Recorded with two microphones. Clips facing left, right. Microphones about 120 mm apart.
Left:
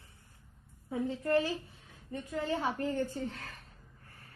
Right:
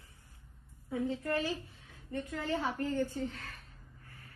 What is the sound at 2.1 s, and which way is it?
Speech, 15° left (ahead or behind).